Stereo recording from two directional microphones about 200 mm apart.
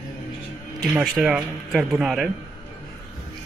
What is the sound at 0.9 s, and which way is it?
Speech, 5° right (ahead or behind).